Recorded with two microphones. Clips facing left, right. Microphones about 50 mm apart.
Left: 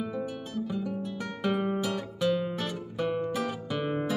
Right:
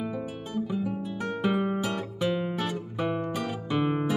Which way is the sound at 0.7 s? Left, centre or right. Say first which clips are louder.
Right 2 dB; centre.